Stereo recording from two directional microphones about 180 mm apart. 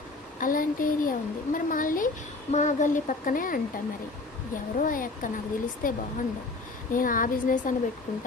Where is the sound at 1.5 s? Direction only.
50° left (ahead or behind).